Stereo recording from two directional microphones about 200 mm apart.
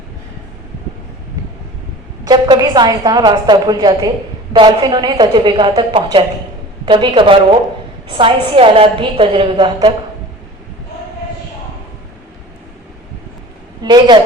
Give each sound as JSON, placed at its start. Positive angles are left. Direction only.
{"t": 2.2, "sound": "a woman's voice", "side_deg": -20}
{"t": 13.8, "sound": "a woman's voice", "side_deg": -20}